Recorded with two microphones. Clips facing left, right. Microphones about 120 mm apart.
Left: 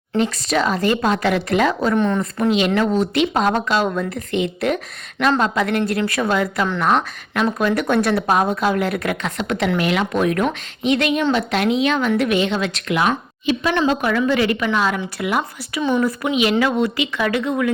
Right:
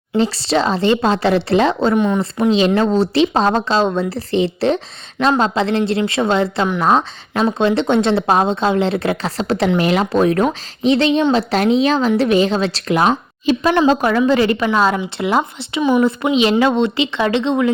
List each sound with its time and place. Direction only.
0.2 s speech: 30° right (ahead or behind)
15.8 s speech: 15° right (ahead or behind)
16.0 s speech: 25° right (ahead or behind)